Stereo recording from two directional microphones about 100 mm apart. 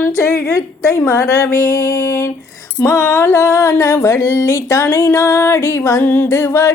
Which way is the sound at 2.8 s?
25° left (ahead or behind).